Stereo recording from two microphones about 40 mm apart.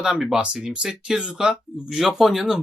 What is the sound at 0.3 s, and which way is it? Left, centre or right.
Speech, right.